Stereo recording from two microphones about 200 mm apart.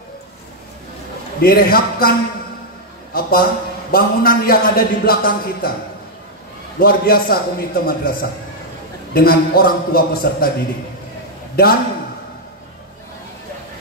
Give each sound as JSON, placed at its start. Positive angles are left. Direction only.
{"t": 1.4, "sound": "a man's voice", "side_deg": 50}
{"t": 6.8, "sound": "a man's voice", "side_deg": 50}
{"t": 11.6, "sound": "a man's voice", "side_deg": 50}